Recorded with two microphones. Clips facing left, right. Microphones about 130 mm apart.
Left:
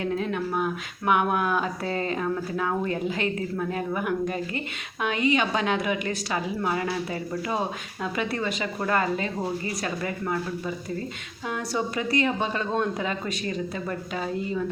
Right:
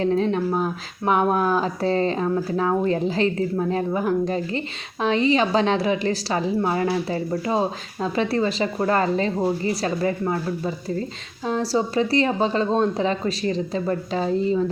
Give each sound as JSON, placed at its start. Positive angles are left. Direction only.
{"t": 0.0, "sound": "speech", "side_deg": -30}